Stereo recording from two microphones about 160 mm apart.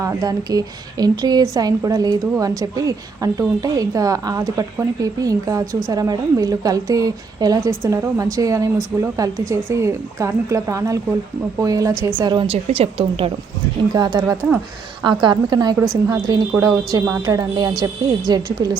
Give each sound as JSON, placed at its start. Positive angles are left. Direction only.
{"t": 0.0, "sound": "a woman's voice", "side_deg": -20}
{"t": 13.9, "sound": "a woman's voice", "side_deg": -25}